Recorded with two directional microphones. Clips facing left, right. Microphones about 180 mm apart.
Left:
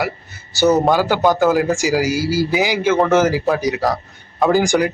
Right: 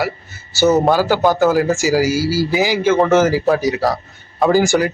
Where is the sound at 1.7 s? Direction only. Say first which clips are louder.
Right 2 dB; 15° left (ahead or behind).